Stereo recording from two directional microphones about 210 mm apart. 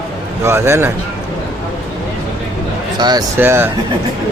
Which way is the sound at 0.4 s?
10° right (ahead or behind).